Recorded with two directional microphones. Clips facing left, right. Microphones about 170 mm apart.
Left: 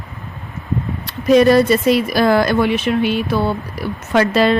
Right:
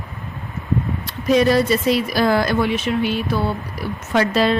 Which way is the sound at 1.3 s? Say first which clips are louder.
Left 5 dB; 55° left (ahead or behind).